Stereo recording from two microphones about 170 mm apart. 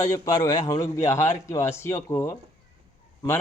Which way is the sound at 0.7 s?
20° left (ahead or behind).